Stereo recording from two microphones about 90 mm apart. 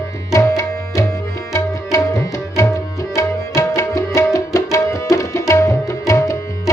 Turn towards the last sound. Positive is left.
turn(degrees=35)  # may be behind; listen again after turning